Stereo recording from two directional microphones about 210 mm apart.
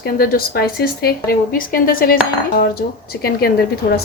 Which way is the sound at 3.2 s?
45° left (ahead or behind).